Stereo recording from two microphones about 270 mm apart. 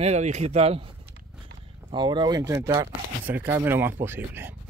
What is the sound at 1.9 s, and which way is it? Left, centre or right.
Speech, centre.